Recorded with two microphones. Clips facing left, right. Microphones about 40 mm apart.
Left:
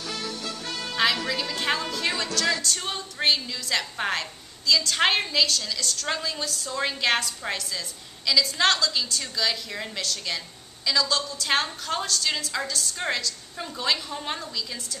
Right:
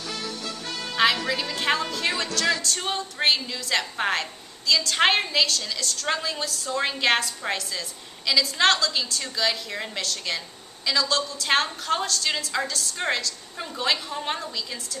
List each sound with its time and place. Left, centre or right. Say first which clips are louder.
0.0 s music: even; centre
2.8 s a woman's voice: right 2 dB; centre